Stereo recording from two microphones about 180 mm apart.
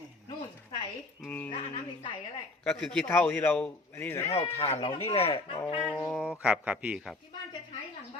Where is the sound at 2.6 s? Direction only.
5° left (ahead or behind).